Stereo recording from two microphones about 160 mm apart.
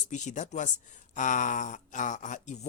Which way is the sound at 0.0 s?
50° left (ahead or behind).